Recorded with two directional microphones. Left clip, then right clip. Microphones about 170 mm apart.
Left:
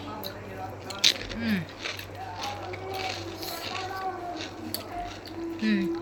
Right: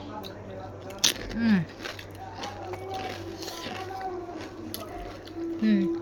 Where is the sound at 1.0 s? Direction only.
40° right (ahead or behind).